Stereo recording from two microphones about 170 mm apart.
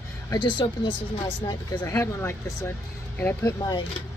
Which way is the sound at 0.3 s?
30° left (ahead or behind).